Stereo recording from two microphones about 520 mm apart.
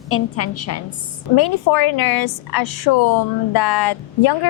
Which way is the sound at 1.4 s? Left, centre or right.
Left.